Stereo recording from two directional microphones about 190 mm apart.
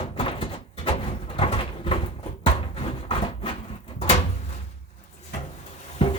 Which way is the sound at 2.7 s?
30° left (ahead or behind).